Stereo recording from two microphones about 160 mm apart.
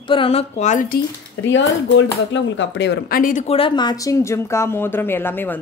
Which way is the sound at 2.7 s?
80° left.